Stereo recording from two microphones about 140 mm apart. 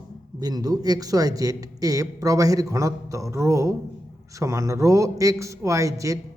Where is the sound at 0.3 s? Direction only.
30° right (ahead or behind).